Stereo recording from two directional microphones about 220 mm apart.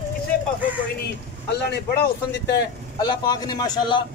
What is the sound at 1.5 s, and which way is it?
Speech, 50° left (ahead or behind).